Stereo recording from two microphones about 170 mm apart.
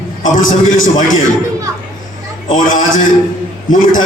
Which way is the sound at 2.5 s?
50° left (ahead or behind).